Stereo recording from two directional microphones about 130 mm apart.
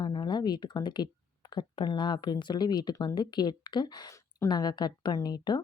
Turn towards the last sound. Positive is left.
turn(degrees=30)  # may be behind; listen again after turning